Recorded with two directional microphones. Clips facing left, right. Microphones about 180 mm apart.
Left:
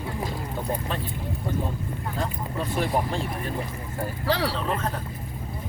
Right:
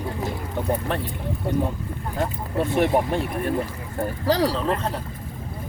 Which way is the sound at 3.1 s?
65° right (ahead or behind).